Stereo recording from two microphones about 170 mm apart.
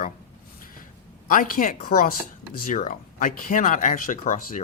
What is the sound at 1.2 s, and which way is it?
Speech, 55° left (ahead or behind).